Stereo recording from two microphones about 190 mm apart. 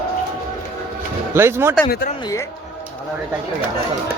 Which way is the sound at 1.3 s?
15° right (ahead or behind).